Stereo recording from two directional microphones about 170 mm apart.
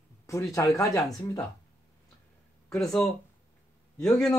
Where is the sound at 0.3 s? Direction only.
20° left (ahead or behind).